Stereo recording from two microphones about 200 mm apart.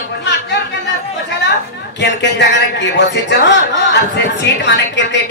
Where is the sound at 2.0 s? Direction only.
60° left (ahead or behind).